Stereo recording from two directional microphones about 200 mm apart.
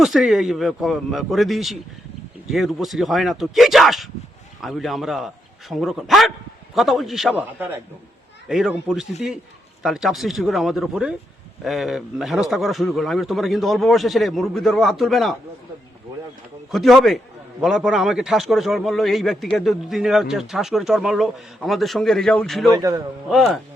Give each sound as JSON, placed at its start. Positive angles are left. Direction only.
{"t": 0.0, "sound": "a man's voice", "side_deg": 0}
{"t": 16.7, "sound": "a man's voice", "side_deg": 0}
{"t": 22.7, "sound": "a man's voice", "side_deg": -15}
{"t": 23.3, "sound": "a man's voice", "side_deg": 0}